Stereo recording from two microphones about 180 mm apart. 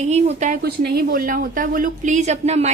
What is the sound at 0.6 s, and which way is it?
Speech, 60° right (ahead or behind).